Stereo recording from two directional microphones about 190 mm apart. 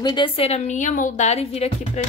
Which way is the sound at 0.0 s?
25° left (ahead or behind).